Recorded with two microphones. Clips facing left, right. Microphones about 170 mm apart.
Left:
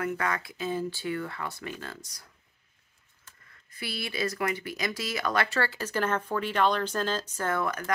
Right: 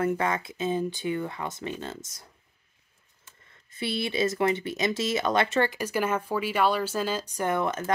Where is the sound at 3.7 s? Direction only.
25° right (ahead or behind).